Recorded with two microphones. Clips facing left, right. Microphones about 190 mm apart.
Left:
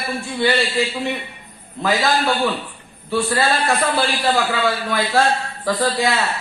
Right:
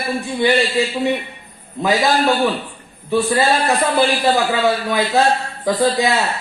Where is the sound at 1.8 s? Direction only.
15° right (ahead or behind).